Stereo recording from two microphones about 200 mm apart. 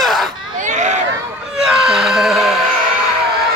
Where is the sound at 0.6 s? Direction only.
35° right (ahead or behind).